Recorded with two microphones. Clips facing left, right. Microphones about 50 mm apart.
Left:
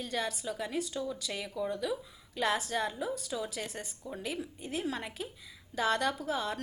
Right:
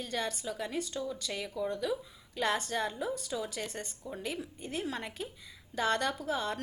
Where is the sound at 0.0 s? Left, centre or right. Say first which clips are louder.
Left 1 dB; centre.